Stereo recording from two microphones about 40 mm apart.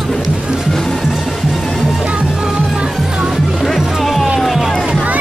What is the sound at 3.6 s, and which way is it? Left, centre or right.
Music, centre.